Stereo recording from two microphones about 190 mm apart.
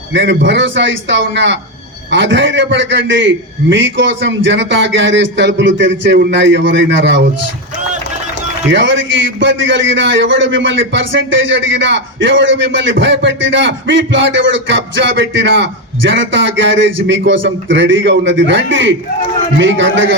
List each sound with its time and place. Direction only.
0.1 s a man's voice: 70° right (ahead or behind)
8.7 s a man's voice: 75° right (ahead or behind)